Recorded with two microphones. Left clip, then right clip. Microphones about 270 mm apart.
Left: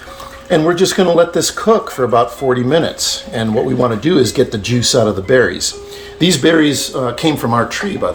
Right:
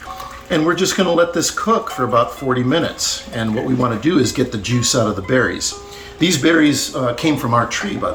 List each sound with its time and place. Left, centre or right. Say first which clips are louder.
0.5 s speech: left 4 dB; left